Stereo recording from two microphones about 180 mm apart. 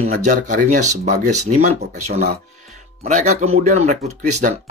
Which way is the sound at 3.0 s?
40° right (ahead or behind).